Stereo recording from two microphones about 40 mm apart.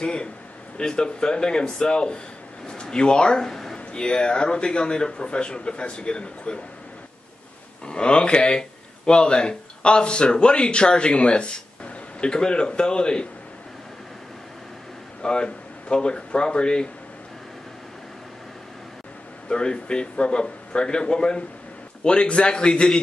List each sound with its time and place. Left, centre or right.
0.0 s a man's voice: left
3.9 s speech: left
7.8 s speech: left
15.2 s speech: left
19.5 s speech: left